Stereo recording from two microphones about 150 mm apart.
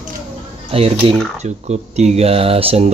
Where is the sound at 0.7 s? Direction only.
40° right (ahead or behind).